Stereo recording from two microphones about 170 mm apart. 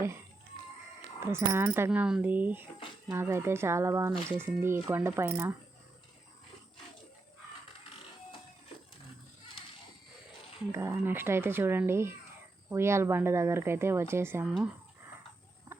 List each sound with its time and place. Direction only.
1.2 s a woman's voice: 15° right (ahead or behind)
10.7 s a woman's voice: 15° right (ahead or behind)
15.7 s a sound: 15° right (ahead or behind)